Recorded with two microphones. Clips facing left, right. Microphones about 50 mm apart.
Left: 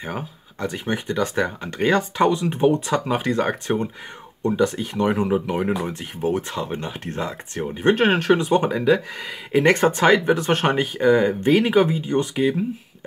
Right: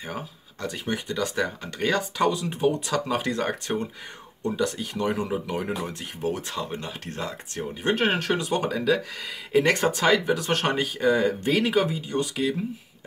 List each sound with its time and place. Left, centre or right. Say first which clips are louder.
0.0 s speech: left 4 dB; left